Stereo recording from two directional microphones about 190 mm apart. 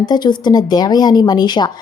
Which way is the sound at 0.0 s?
25° left (ahead or behind).